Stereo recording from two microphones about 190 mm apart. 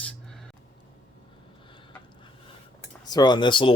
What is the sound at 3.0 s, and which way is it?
Speech, 20° left (ahead or behind).